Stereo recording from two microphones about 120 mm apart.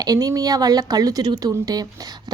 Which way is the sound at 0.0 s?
30° right (ahead or behind).